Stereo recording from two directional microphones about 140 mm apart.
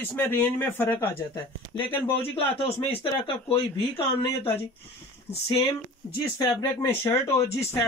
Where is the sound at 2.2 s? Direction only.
45° left (ahead or behind).